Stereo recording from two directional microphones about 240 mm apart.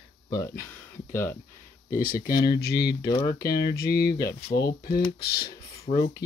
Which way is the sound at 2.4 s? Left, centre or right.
Centre.